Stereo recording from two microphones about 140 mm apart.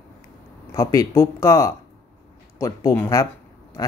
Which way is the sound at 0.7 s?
25° left (ahead or behind).